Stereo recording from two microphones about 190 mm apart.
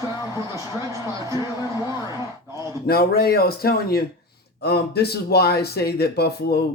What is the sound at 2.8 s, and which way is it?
Speech, 55° left (ahead or behind).